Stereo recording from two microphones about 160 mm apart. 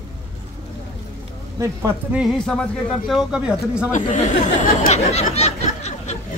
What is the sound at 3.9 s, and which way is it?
Speech, 50° left (ahead or behind).